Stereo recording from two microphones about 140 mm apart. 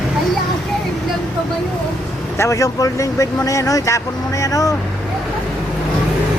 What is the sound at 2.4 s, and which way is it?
Speech, 20° left (ahead or behind).